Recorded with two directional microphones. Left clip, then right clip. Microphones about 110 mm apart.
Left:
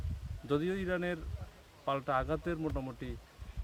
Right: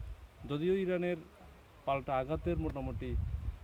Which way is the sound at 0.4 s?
30° left (ahead or behind).